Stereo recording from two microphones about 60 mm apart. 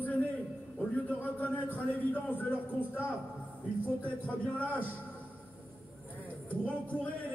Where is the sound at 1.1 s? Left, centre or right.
Left.